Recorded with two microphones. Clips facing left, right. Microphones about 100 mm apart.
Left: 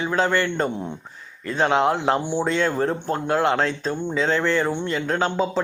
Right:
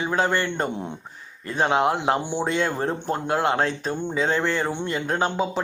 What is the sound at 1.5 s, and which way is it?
Speech, 20° right (ahead or behind).